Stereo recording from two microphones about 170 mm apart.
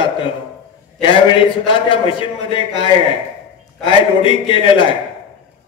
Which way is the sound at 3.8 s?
30° left (ahead or behind).